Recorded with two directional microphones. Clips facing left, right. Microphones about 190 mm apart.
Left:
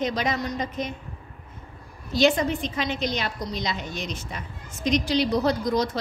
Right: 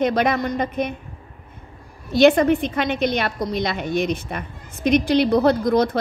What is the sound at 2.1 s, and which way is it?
A woman's voice, 60° right (ahead or behind).